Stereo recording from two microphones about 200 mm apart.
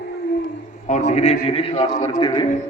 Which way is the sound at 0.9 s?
35° left (ahead or behind).